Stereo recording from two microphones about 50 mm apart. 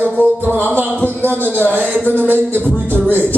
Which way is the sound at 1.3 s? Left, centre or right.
Right.